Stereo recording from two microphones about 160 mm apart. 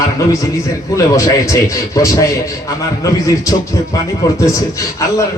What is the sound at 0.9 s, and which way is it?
A man's voice, 20° left (ahead or behind).